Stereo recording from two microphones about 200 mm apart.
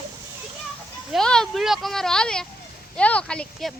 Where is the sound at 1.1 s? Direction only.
5° left (ahead or behind).